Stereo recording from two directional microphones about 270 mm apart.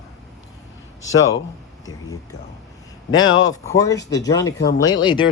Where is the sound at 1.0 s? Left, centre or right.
Left.